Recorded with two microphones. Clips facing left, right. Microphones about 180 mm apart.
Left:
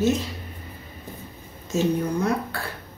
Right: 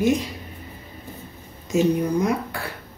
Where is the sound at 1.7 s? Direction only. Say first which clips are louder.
Right 3 dB; 15° right (ahead or behind).